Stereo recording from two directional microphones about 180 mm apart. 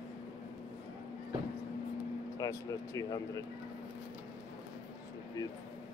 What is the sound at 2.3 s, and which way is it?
Speech, 20° left (ahead or behind).